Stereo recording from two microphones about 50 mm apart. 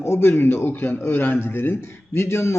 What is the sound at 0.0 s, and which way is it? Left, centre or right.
A man's voice, left.